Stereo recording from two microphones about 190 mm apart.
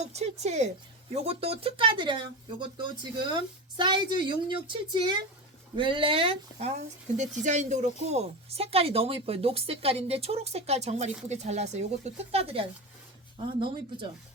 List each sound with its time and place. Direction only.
0.0 s speech: 35° right (ahead or behind)